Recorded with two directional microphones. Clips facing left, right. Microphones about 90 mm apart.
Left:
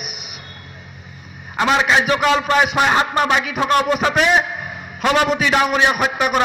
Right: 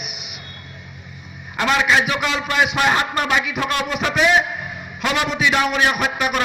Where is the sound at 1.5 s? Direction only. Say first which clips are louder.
Left 2 dB; 35° left (ahead or behind).